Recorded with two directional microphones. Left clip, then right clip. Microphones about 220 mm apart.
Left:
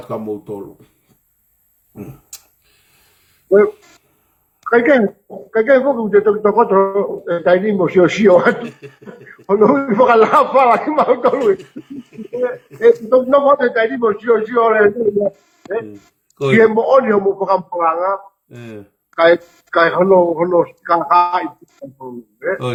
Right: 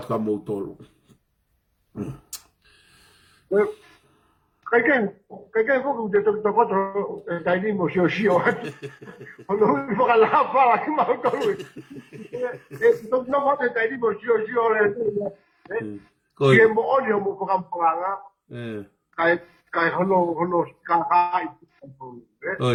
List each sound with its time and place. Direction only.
0.1 s speech: 5° right (ahead or behind)
1.9 s a sound: 10° right (ahead or behind)
4.6 s speech: 55° left (ahead or behind)
8.6 s speech: 5° right (ahead or behind)
9.3 s a man's voice: 55° left (ahead or behind)
12.8 s speech: 55° left (ahead or behind)
18.4 s speech: centre (ahead or behind)
19.1 s speech: 55° left (ahead or behind)